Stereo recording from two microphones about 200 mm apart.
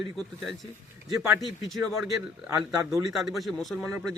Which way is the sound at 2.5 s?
15° right (ahead or behind).